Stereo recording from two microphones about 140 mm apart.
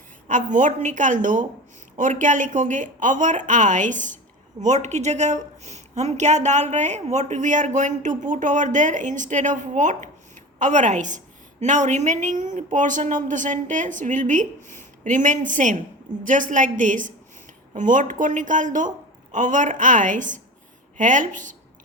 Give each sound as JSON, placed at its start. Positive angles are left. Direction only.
{"t": 0.3, "sound": "a woman's voice", "side_deg": -65}